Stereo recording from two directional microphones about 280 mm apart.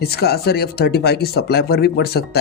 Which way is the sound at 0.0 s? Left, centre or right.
Left.